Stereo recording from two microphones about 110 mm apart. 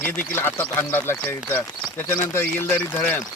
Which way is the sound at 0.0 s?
20° left (ahead or behind).